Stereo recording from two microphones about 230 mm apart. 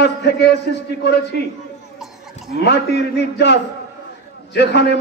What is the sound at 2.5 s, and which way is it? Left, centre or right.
A man's voice, left.